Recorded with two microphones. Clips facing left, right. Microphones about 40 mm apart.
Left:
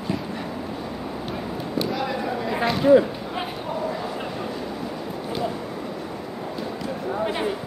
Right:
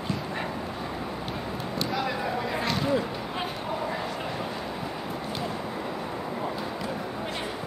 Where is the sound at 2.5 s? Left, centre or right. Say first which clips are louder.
Left 13 dB; centre.